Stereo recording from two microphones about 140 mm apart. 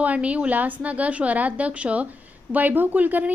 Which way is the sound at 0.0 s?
10° right (ahead or behind).